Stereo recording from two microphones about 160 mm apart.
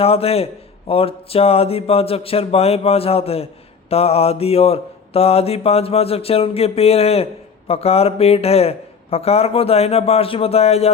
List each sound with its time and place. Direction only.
0.0 s a man's voice: 40° left (ahead or behind)